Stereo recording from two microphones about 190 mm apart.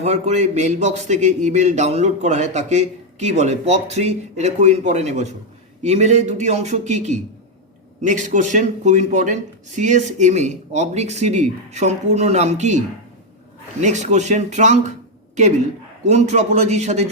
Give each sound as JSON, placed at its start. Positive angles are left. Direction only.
{"t": 0.0, "sound": "a man's voice", "side_deg": -35}
{"t": 13.8, "sound": "a man's voice", "side_deg": -40}
{"t": 16.0, "sound": "a man's voice", "side_deg": -35}